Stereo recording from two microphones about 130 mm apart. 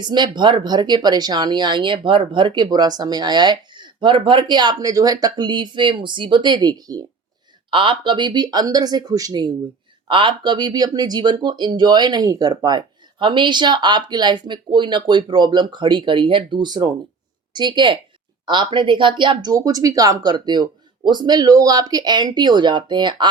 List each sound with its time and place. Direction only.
0.0 s speech: 35° right (ahead or behind)
7.7 s a woman's voice: 40° right (ahead or behind)